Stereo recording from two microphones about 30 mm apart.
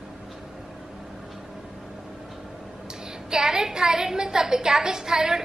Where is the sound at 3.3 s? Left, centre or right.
Centre.